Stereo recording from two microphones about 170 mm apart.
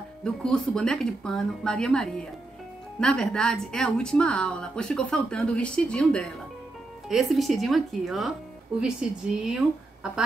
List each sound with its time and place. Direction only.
0.2 s speech: 5° left (ahead or behind)